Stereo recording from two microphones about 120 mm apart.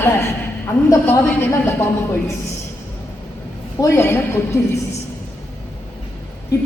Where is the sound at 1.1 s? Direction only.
20° left (ahead or behind).